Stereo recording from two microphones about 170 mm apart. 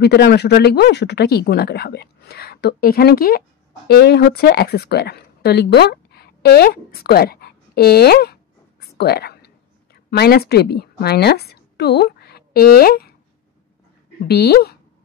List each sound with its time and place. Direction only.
0.0 s speech: 75° left (ahead or behind)
8.9 s whispering: 70° left (ahead or behind)
10.1 s a woman's voice: 70° left (ahead or behind)
14.2 s speech: 70° left (ahead or behind)